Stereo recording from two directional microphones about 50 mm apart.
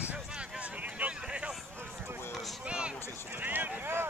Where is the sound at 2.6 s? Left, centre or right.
Right.